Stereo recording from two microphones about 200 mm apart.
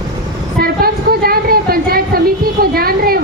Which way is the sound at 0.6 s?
50° right (ahead or behind).